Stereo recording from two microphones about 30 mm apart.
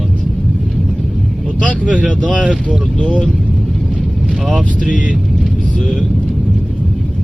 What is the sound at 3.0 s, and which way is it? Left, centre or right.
Speech, left.